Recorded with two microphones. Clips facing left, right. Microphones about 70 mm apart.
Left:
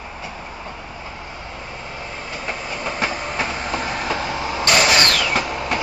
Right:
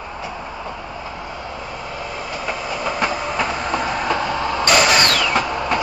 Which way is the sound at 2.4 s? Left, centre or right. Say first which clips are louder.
Right 3 dB; centre.